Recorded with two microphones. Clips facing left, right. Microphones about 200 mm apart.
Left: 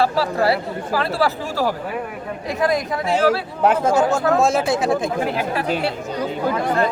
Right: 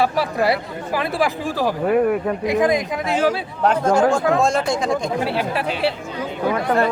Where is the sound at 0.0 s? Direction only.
15° right (ahead or behind).